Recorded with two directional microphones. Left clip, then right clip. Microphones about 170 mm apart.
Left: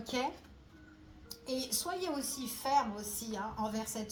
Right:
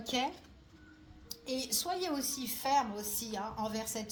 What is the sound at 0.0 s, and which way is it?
Speech, 30° right (ahead or behind).